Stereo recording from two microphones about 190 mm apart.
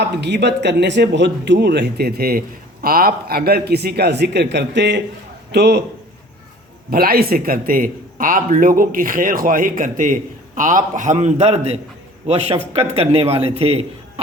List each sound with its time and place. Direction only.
0.0 s speech: 60° right (ahead or behind)
6.9 s a man's voice: 50° right (ahead or behind); by 13.8 s 30° right (ahead or behind)